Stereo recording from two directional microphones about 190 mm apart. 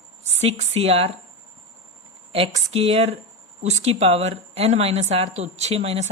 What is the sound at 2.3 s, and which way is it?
A woman's voice, 35° right (ahead or behind).